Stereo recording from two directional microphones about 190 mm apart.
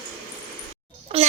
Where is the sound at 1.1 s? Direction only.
30° right (ahead or behind).